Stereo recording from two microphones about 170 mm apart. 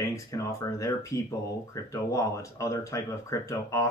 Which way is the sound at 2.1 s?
20° left (ahead or behind).